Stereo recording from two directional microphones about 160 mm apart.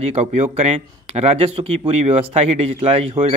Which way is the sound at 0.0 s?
45° right (ahead or behind).